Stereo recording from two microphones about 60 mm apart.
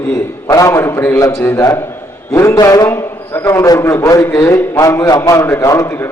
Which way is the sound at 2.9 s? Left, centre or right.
Left.